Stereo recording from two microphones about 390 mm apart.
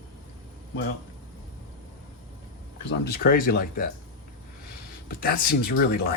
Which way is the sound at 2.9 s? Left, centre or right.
Left.